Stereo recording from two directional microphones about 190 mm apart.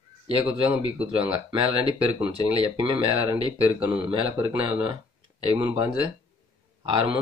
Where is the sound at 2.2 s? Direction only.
30° right (ahead or behind).